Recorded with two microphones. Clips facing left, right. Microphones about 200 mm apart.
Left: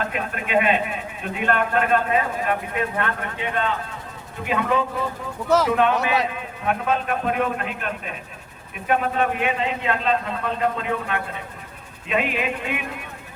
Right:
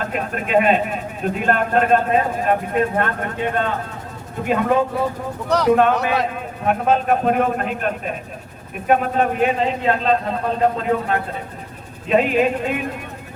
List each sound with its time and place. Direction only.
0.0 s a man's voice: 45° right (ahead or behind)
5.5 s speech: 5° left (ahead or behind)
6.3 s a man's voice: 45° right (ahead or behind)